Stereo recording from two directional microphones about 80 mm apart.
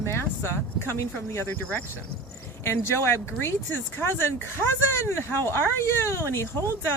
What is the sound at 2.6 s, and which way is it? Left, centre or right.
Speech, left.